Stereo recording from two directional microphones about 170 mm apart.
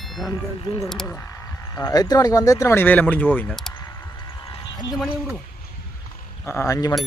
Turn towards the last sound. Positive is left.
turn(degrees=20)  # may be behind; listen again after turning